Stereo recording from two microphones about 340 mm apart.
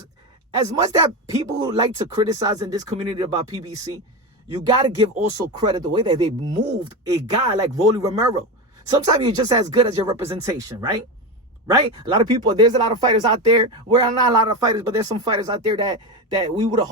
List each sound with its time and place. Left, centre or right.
0.5 s speech: centre